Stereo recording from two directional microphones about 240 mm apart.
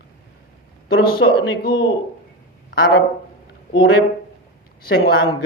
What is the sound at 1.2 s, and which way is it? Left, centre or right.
Speech, left.